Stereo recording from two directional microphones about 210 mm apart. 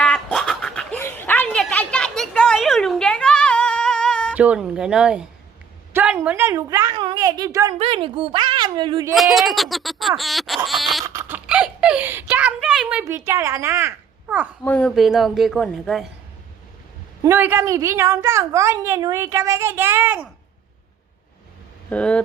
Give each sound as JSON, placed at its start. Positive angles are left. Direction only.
{"t": 0.0, "sound": "a sound", "side_deg": 5}
{"t": 4.4, "sound": "bleat", "side_deg": -5}
{"t": 5.9, "sound": "a woman's voice", "side_deg": -10}
{"t": 9.1, "sound": "bleat", "side_deg": 0}
{"t": 11.0, "sound": "giggle", "side_deg": -15}
{"t": 14.6, "sound": "bleat", "side_deg": 5}
{"t": 17.2, "sound": "a woman's voice", "side_deg": -10}
{"t": 21.8, "sound": "bleat", "side_deg": 5}